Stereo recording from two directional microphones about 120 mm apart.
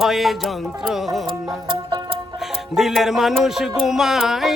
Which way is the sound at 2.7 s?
Centre (ahead or behind).